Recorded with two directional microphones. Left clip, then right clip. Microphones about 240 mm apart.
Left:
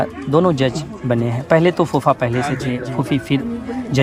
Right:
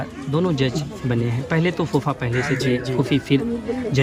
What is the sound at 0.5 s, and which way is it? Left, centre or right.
Speech, left.